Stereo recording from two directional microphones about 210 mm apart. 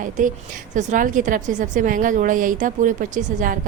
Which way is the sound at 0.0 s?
35° right (ahead or behind).